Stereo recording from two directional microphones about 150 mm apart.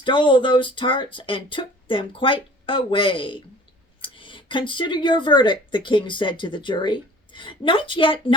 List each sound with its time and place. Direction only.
0.0 s speech: 35° left (ahead or behind)